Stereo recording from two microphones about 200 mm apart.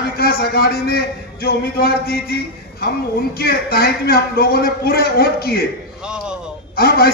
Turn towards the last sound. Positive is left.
turn(degrees=50)  # may be behind; listen again after turning